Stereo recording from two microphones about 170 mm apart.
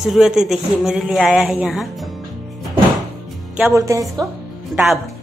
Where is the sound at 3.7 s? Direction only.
20° right (ahead or behind).